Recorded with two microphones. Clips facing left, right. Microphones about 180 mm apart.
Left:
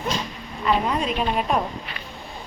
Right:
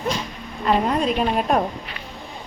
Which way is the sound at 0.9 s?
45° right (ahead or behind).